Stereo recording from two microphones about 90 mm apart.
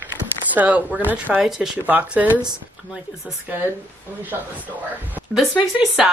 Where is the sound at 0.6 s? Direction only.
15° right (ahead or behind).